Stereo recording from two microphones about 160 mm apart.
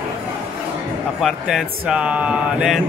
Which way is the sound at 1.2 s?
5° right (ahead or behind).